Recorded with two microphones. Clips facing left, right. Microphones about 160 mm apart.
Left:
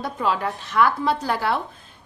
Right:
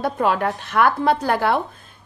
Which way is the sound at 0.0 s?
60° right (ahead or behind).